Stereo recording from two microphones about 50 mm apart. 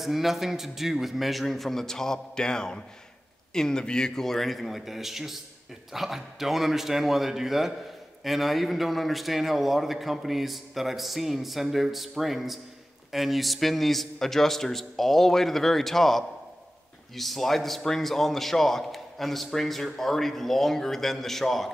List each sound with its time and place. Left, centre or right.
0.0 s a man's voice: centre